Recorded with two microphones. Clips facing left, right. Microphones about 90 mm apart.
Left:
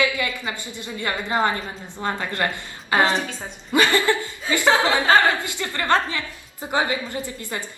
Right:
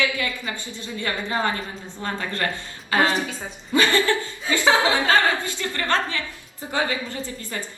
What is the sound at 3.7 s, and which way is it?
Chuckle, 15° left (ahead or behind).